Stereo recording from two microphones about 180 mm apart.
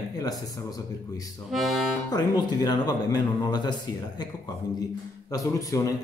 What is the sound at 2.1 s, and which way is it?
Speech, 20° left (ahead or behind).